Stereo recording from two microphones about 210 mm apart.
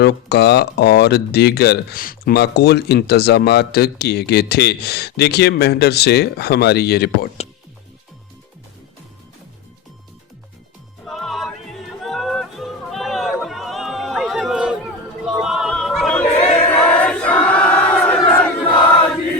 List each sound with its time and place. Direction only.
0.0 s speech: 50° left (ahead or behind)
11.0 s music: centre (ahead or behind)
15.3 s yodeling: centre (ahead or behind)
16.6 s crowd: 10° left (ahead or behind)